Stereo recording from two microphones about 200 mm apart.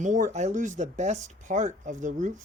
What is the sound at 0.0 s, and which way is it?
Speech, 40° right (ahead or behind).